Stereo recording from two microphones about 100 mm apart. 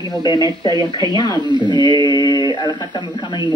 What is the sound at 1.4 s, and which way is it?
Speech, 50° right (ahead or behind).